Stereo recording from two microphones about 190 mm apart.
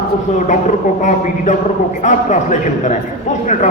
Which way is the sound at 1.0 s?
40° left (ahead or behind).